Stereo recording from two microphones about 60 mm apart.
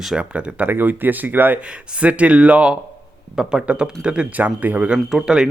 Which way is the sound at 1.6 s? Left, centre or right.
Centre.